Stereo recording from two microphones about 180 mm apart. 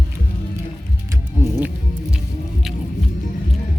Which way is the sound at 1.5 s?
10° right (ahead or behind).